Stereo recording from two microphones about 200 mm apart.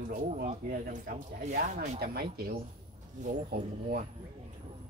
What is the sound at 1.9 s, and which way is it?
Speech, 50° right (ahead or behind).